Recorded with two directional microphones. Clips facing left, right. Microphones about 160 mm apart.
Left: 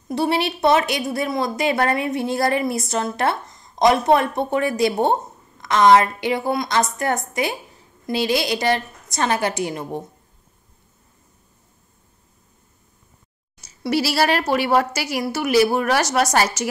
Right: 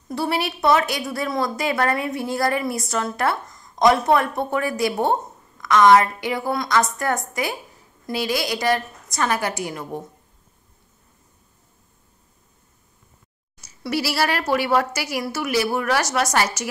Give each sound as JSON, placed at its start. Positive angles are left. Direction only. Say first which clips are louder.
{"t": 0.1, "sound": "a woman's voice", "louder": "left 3 dB", "side_deg": 25}
{"t": 13.6, "sound": "a woman's voice", "louder": "left 4 dB", "side_deg": 25}